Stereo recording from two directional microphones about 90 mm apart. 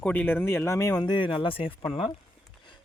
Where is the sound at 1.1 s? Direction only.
65° left (ahead or behind); by 1.7 s 85° left.